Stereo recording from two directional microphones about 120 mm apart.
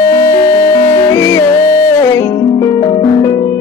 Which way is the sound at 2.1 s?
30° left (ahead or behind).